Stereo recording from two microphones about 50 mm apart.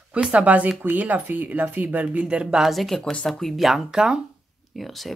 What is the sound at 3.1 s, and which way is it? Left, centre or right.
Speech, left.